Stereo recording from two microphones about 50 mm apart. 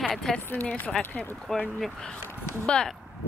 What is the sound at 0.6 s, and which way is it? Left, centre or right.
Speech, left.